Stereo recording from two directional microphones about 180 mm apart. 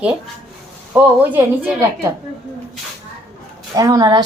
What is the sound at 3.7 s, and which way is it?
Speech, 20° right (ahead or behind).